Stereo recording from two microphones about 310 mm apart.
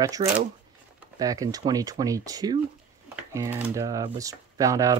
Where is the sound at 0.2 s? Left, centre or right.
Centre.